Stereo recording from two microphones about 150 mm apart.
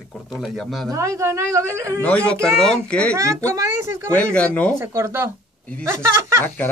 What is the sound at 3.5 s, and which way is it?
Speech, 20° right (ahead or behind).